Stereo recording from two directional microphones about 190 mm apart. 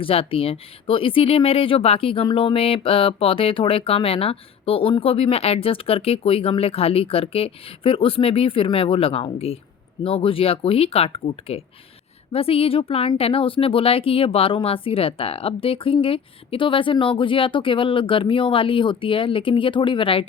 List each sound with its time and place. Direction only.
0.0 s speech: 30° left (ahead or behind)